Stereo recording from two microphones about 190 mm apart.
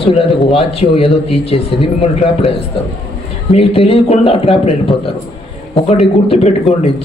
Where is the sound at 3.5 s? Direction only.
30° left (ahead or behind).